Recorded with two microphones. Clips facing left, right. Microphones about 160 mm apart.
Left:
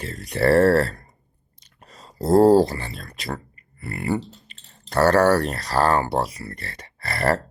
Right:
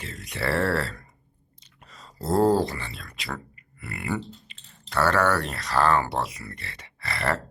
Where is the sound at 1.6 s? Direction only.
40° left (ahead or behind).